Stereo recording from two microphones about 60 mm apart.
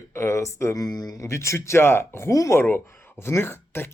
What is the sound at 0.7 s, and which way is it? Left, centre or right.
Speech, left.